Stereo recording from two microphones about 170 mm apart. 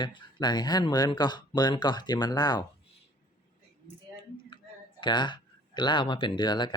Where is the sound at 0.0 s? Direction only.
25° left (ahead or behind).